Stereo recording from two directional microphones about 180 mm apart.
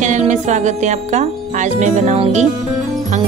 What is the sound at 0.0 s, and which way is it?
Speech, 40° right (ahead or behind).